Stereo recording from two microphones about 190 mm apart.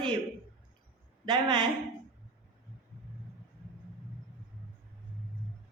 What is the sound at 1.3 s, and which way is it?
Speech, 20° right (ahead or behind).